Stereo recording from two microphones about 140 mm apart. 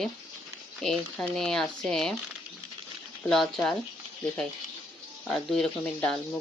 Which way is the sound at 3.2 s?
5° left (ahead or behind).